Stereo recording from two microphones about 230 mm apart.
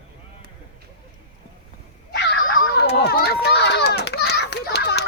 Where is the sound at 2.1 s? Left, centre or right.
Left.